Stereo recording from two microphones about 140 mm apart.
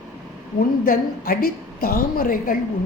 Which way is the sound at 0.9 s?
90° left.